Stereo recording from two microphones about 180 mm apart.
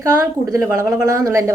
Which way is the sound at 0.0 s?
20° right (ahead or behind).